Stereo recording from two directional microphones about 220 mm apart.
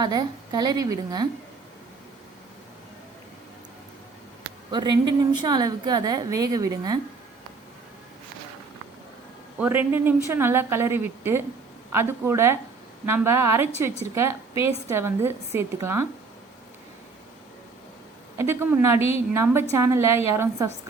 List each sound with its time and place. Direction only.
0.0 s a woman's voice: 15° right (ahead or behind)
4.7 s a woman's voice: 20° right (ahead or behind)
9.6 s a woman's voice: 10° right (ahead or behind)
18.3 s a woman's voice: 10° right (ahead or behind)